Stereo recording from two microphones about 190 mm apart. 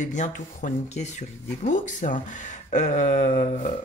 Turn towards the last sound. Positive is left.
turn(degrees=40)  # may be behind; listen again after turning